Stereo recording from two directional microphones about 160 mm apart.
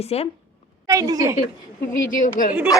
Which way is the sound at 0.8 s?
20° right (ahead or behind).